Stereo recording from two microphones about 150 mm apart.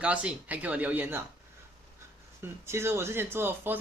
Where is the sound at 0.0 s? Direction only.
10° right (ahead or behind).